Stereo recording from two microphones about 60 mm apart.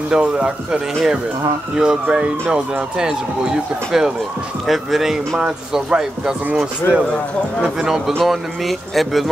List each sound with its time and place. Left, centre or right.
0.1 s speech: centre
8.2 s speech: centre